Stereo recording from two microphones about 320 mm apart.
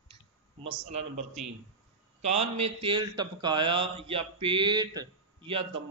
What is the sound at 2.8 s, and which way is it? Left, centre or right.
A man's voice, centre.